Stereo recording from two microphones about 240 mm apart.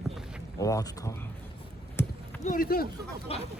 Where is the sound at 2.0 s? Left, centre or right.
Centre.